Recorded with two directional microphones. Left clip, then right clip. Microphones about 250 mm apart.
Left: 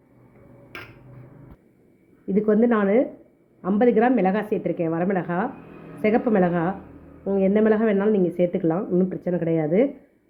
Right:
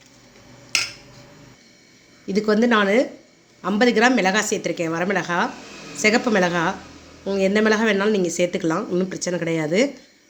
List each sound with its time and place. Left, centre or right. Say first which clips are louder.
2.2 s speech: right 1 dB; centre